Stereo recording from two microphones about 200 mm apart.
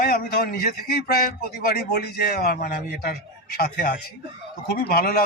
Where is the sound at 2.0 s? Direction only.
50° left (ahead or behind).